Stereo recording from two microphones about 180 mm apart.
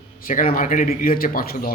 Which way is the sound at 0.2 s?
50° left (ahead or behind).